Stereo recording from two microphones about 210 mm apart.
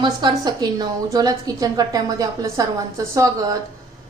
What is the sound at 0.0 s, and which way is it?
A woman's voice, 20° right (ahead or behind).